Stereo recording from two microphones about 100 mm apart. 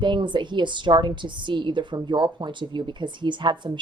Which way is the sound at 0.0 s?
50° right (ahead or behind).